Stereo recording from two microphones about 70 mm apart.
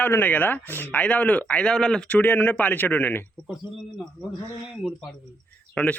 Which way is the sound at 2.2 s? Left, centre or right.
Left.